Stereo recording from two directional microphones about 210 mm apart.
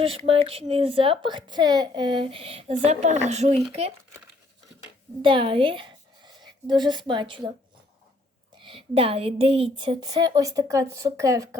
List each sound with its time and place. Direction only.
0.0 s a woman's voice: 25° right (ahead or behind)
5.2 s a woman's voice: 25° right (ahead or behind)
8.5 s a woman's voice: 25° right (ahead or behind)